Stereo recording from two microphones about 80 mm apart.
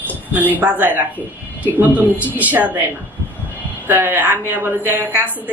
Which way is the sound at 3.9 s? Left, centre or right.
Right.